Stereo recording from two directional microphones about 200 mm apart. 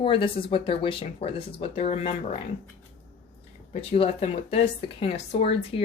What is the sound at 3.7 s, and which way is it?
Speech, 30° left (ahead or behind).